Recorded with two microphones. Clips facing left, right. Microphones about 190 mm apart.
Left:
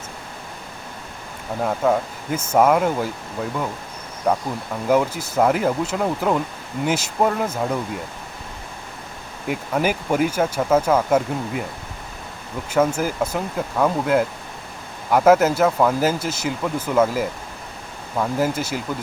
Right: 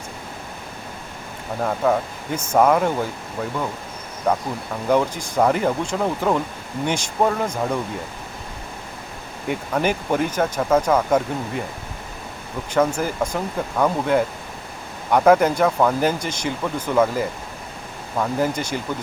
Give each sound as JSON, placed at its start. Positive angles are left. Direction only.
{"t": 1.6, "sound": "speech", "side_deg": 5}
{"t": 4.3, "sound": "speech", "side_deg": 5}
{"t": 9.5, "sound": "speech", "side_deg": 5}
{"t": 12.7, "sound": "speech", "side_deg": 5}